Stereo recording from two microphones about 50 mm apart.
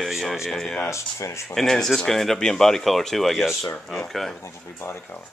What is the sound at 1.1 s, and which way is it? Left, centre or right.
Speech, left.